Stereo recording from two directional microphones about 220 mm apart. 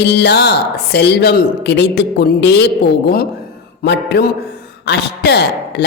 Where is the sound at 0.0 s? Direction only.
50° left (ahead or behind).